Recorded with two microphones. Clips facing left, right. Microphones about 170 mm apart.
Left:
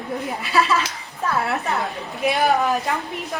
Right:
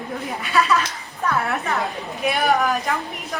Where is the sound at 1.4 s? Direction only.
20° left (ahead or behind).